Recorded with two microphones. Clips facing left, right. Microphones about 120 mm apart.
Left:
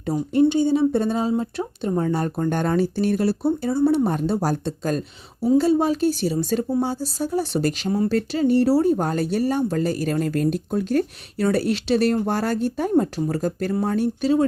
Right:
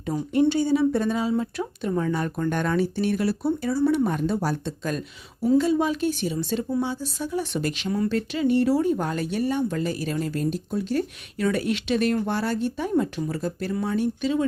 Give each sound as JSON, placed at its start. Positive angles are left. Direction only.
{"t": 0.0, "sound": "speech", "side_deg": 30}
{"t": 0.4, "sound": "speech", "side_deg": 20}
{"t": 11.3, "sound": "speech", "side_deg": 35}